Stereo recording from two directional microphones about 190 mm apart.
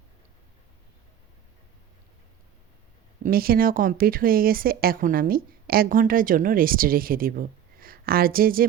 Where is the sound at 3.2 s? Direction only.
50° right (ahead or behind).